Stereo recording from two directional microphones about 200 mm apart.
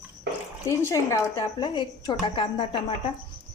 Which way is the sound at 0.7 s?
15° left (ahead or behind).